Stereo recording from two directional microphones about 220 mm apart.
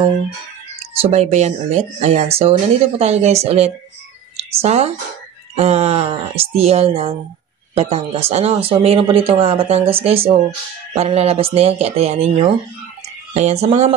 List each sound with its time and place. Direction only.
1.1 s speech: 30° right (ahead or behind)
13.3 s speech: 30° right (ahead or behind)